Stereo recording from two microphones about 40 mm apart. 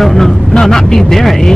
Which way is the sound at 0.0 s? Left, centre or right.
Centre.